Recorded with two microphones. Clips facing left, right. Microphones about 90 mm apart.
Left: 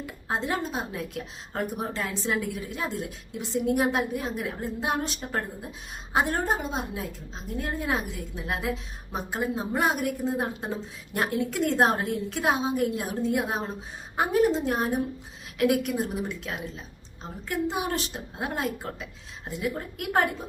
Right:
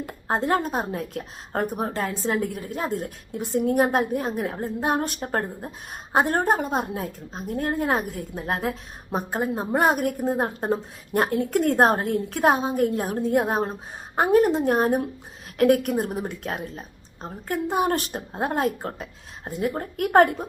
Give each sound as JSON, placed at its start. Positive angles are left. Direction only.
{"t": 0.0, "sound": "a woman's voice", "side_deg": -50}